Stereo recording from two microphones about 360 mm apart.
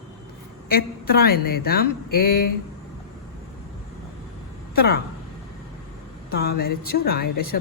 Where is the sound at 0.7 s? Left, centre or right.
Left.